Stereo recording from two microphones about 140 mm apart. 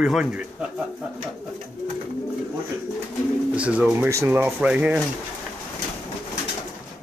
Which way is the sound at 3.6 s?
10° right (ahead or behind).